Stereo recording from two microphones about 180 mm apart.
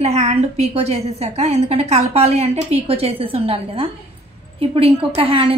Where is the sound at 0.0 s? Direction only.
40° right (ahead or behind).